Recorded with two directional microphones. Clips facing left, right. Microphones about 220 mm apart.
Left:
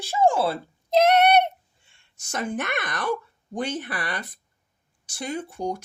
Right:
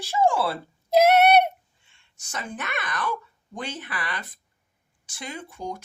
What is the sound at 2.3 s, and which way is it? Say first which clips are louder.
Speech: left 6 dB; 50° left (ahead or behind).